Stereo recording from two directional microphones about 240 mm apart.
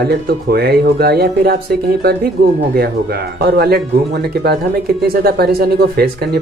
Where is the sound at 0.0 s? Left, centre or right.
Right.